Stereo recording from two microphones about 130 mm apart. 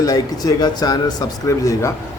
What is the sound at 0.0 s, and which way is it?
A man's voice, 30° left (ahead or behind).